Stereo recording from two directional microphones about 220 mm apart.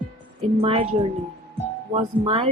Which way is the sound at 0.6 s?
25° right (ahead or behind).